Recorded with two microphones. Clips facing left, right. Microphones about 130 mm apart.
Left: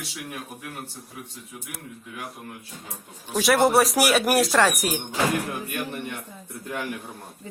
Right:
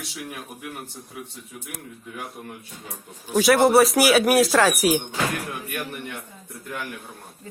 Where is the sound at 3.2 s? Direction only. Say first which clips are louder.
Right 3 dB; centre (ahead or behind).